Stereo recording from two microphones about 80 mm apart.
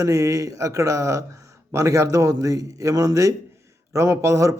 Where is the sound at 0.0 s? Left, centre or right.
Right.